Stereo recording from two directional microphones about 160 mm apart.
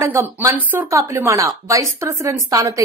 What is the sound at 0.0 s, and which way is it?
A woman's voice, 15° right (ahead or behind).